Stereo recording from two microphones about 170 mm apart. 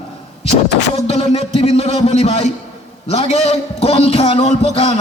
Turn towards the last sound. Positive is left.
turn(degrees=40)  # may be behind; listen again after turning